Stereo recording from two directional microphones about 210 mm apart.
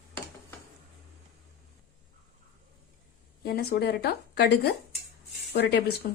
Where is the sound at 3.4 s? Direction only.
45° left (ahead or behind).